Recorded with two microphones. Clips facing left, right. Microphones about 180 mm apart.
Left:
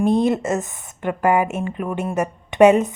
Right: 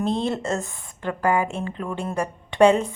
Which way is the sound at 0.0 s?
15° left (ahead or behind).